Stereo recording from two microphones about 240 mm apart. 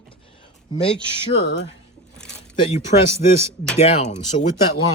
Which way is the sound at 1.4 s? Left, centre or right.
Left.